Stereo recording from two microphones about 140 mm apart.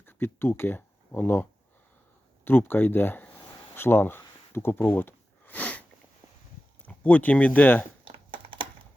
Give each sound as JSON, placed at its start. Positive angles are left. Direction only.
{"t": 0.0, "sound": "speech", "side_deg": 15}
{"t": 3.8, "sound": "a sound", "side_deg": 15}
{"t": 6.8, "sound": "speech", "side_deg": 10}
{"t": 8.0, "sound": "computer keyboard", "side_deg": -35}